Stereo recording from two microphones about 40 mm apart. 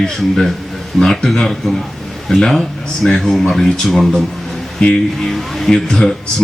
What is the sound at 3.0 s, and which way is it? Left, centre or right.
Speech, left.